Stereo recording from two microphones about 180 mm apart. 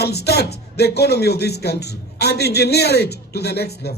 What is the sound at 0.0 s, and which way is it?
Speech, 65° left (ahead or behind).